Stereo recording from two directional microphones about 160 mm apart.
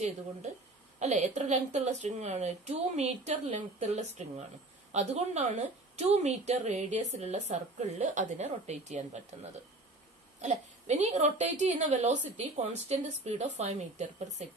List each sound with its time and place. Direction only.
0.9 s a woman's voice: 45° right (ahead or behind)